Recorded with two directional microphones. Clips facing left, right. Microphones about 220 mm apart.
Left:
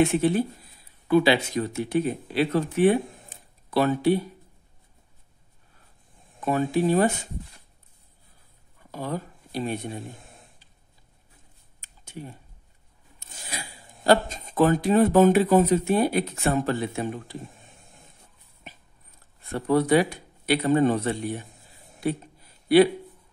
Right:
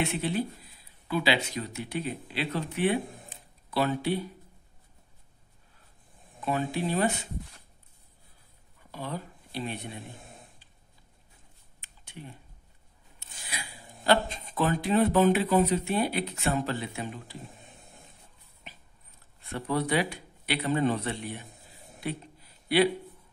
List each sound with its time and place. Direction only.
0.0 s speech: 50° left (ahead or behind)
6.4 s speech: 45° left (ahead or behind)
8.9 s speech: 45° left (ahead or behind)
11.8 s a sound: 45° left (ahead or behind)
13.2 s speech: 45° left (ahead or behind)
19.5 s speech: 45° left (ahead or behind)